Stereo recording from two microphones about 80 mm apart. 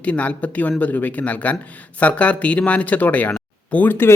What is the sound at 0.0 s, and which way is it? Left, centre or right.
Speech, centre.